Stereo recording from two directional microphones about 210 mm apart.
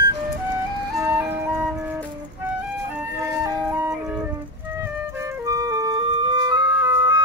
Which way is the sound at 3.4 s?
10° right (ahead or behind).